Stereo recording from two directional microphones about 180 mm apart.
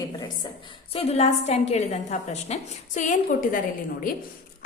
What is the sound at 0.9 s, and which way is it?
A woman's voice, 35° left (ahead or behind).